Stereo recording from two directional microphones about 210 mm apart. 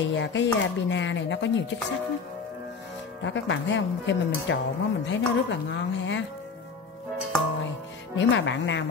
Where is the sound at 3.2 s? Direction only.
60° left (ahead or behind).